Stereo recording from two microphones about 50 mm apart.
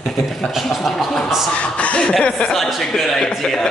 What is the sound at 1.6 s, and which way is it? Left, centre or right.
Speech, left.